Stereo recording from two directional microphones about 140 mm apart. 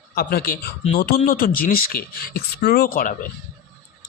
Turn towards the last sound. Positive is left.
turn(degrees=85)